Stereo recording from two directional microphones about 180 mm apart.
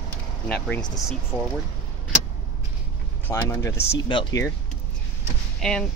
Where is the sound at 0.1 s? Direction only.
10° left (ahead or behind).